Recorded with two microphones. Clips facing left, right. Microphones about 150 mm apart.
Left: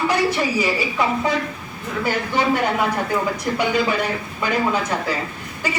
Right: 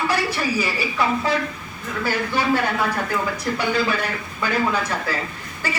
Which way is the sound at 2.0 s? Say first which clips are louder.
Left 2 dB; 20° left (ahead or behind).